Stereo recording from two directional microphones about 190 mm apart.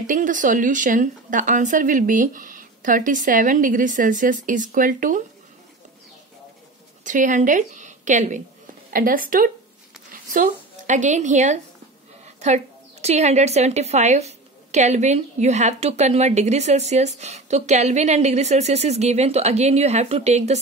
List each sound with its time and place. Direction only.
0.0 s speech: 45° right (ahead or behind)
7.1 s a woman's voice: 40° right (ahead or behind)